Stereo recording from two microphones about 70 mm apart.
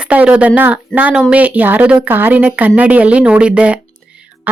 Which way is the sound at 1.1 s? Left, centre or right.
Centre.